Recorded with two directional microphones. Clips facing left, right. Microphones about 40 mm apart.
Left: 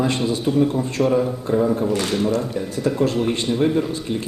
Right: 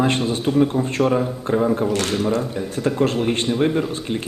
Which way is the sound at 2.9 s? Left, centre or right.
Right.